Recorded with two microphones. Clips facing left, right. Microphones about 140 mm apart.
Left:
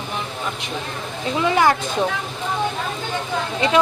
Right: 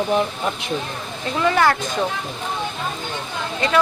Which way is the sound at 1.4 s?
15° left (ahead or behind).